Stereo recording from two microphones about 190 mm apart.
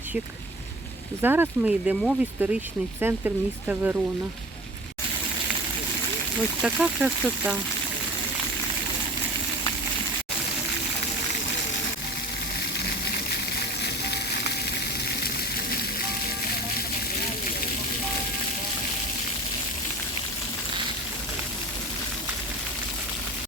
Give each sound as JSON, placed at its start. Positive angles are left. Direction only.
{"t": 1.2, "sound": "speech", "side_deg": -10}
{"t": 6.6, "sound": "speech", "side_deg": -5}
{"t": 13.8, "sound": "frying", "side_deg": 60}